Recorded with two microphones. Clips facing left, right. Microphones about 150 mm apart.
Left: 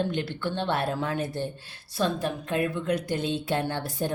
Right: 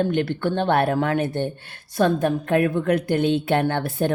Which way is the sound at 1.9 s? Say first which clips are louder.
Right 8 dB; 55° right (ahead or behind).